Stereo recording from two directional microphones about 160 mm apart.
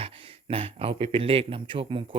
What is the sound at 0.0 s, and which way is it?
Speech, 35° right (ahead or behind).